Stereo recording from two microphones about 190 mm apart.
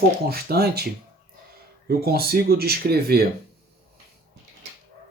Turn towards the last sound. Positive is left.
turn(degrees=-55)  # may be behind; listen again after turning